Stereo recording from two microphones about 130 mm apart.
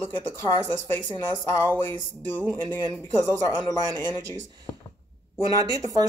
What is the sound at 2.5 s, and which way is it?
Speech, 30° right (ahead or behind).